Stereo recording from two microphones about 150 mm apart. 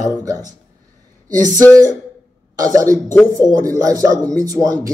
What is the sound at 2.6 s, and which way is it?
Speech, 20° right (ahead or behind).